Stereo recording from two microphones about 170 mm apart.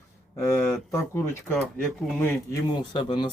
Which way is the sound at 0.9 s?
15° left (ahead or behind).